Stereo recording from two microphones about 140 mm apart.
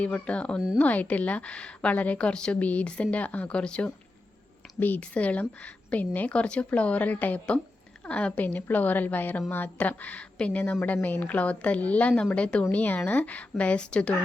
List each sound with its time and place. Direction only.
0.0 s a woman's voice: 10° left (ahead or behind)